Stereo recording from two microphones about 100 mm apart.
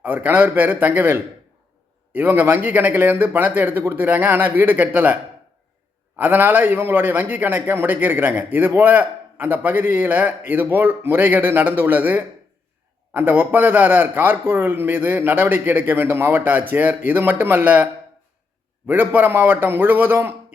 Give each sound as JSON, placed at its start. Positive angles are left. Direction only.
{"t": 0.0, "sound": "a man's voice", "side_deg": -15}
{"t": 6.1, "sound": "a man's voice", "side_deg": -20}
{"t": 18.9, "sound": "a man's voice", "side_deg": -20}